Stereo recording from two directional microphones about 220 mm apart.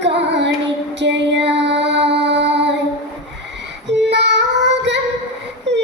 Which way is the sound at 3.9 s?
50° right (ahead or behind).